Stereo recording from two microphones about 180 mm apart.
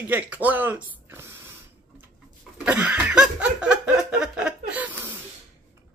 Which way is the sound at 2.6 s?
10° right (ahead or behind).